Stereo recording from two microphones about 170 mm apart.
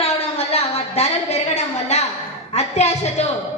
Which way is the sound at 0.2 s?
35° left (ahead or behind).